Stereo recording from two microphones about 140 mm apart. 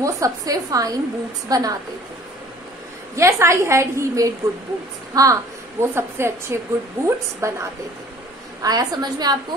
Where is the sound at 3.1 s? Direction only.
20° right (ahead or behind).